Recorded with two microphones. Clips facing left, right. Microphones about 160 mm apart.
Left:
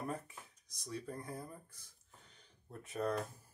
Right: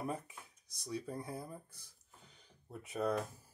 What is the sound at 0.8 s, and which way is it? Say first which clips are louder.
Speech: right 2 dB; 10° right (ahead or behind).